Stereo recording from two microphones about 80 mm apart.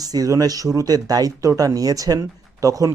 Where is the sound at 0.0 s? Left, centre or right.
Right.